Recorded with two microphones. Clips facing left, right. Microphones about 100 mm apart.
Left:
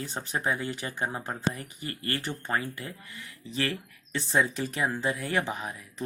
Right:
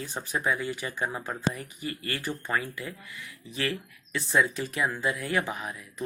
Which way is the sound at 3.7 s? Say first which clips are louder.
Right 1 dB; 25° left (ahead or behind).